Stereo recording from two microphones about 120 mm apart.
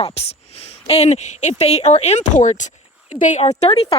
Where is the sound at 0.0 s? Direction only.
60° left (ahead or behind); by 3.4 s 90° left.